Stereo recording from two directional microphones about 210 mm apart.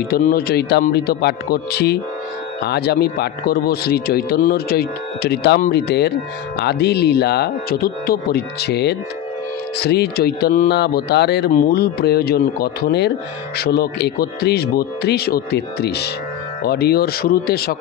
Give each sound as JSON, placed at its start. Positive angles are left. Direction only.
{"t": 0.1, "sound": "speech", "side_deg": 45}